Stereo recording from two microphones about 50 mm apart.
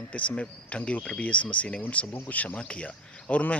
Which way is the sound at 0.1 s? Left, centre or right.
Left.